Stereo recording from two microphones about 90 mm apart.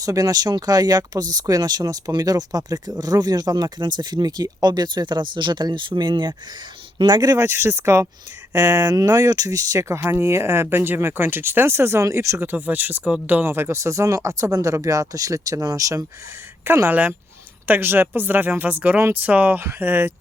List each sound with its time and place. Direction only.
0.0 s speech: 40° right (ahead or behind)
7.4 s speech: 30° right (ahead or behind)
16.6 s speech: 25° right (ahead or behind)